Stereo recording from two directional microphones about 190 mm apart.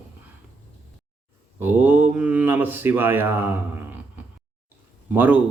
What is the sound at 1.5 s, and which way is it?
Speech, 10° right (ahead or behind).